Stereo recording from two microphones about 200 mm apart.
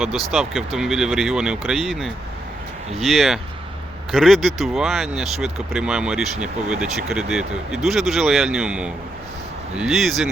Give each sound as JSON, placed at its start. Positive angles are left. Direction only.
{"t": 0.3, "sound": "speech", "side_deg": 0}